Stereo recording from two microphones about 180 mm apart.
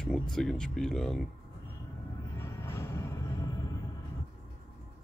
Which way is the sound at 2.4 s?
15° left (ahead or behind).